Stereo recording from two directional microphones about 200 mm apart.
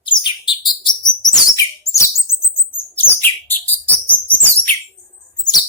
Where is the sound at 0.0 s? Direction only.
25° left (ahead or behind).